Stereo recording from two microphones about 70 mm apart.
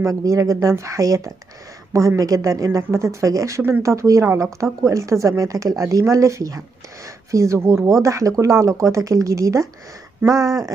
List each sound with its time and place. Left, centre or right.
0.0 s speech: right